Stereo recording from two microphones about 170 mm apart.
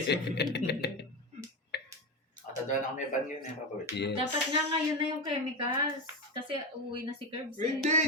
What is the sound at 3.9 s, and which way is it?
Speech, 15° right (ahead or behind).